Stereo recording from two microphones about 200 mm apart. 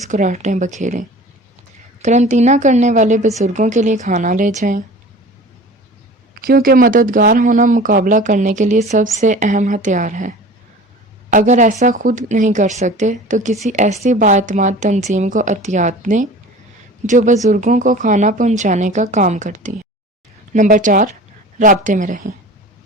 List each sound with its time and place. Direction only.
0.1 s speech: 40° right (ahead or behind)
6.4 s speech: 45° right (ahead or behind)